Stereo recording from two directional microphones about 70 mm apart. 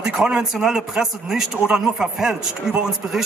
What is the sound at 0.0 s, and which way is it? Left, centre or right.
A man's voice, centre.